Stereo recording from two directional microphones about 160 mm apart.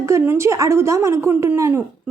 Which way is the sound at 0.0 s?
15° right (ahead or behind).